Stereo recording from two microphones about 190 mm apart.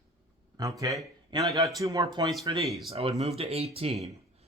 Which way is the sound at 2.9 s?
30° right (ahead or behind).